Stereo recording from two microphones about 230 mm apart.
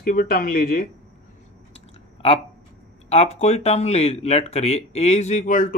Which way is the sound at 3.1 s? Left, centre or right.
Left.